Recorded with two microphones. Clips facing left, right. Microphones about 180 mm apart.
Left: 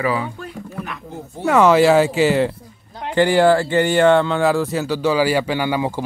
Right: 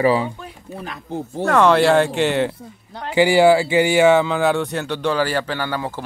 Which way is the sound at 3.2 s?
10° right (ahead or behind).